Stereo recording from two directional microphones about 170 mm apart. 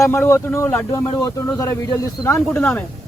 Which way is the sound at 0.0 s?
15° left (ahead or behind).